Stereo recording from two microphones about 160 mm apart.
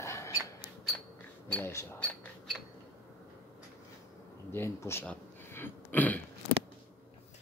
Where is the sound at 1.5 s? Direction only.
15° left (ahead or behind).